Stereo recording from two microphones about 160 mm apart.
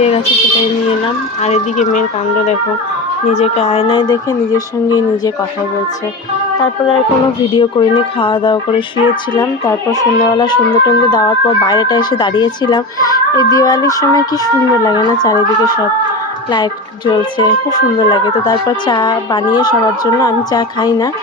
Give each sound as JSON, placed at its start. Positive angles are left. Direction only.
{"t": 1.5, "sound": "speech", "side_deg": 45}
{"t": 3.3, "sound": "speech", "side_deg": 40}
{"t": 7.5, "sound": "speech", "side_deg": 30}
{"t": 17.1, "sound": "speech", "side_deg": 25}